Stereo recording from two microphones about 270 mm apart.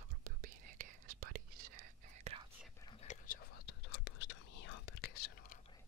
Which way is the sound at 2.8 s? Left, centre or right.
Left.